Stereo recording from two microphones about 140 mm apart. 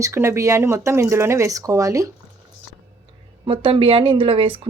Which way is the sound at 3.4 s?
40° right (ahead or behind).